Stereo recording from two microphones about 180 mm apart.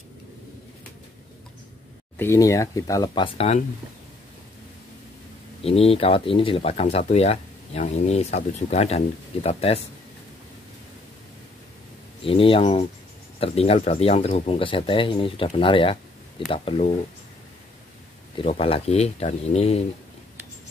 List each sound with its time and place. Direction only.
2.1 s speech: 15° left (ahead or behind)
3.3 s speech: 35° left (ahead or behind)
5.6 s speech: 35° left (ahead or behind)
12.2 s speech: 30° left (ahead or behind)
18.4 s speech: 35° left (ahead or behind)